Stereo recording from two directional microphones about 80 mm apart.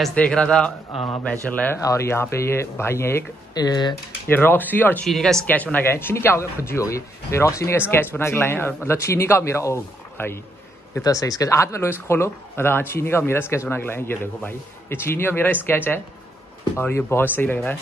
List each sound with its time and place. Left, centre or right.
0.1 s a man's voice: centre
1.8 s speech: left
3.5 s speech: left
4.3 s speech: left
5.0 s speech: centre
5.5 s a man's voice: left
11.0 s speech: left